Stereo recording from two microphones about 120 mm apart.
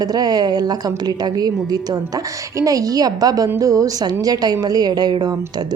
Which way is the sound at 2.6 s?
30° right (ahead or behind).